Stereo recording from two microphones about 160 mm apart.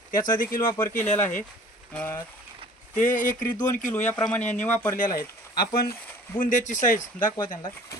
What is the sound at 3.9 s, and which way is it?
Speech, 10° left (ahead or behind).